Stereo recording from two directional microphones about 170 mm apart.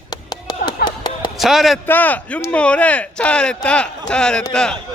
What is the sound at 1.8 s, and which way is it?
Speech, 10° left (ahead or behind).